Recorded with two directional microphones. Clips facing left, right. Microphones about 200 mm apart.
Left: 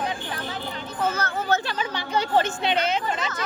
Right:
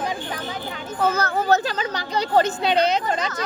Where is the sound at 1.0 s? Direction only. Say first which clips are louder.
Right 5 dB; 35° right (ahead or behind).